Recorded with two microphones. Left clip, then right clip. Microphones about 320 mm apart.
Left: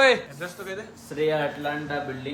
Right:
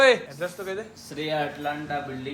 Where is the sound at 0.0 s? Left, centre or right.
Centre.